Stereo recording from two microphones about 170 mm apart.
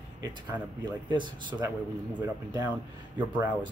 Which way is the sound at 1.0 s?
25° right (ahead or behind).